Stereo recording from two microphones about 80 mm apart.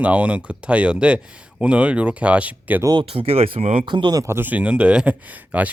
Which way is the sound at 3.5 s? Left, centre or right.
Right.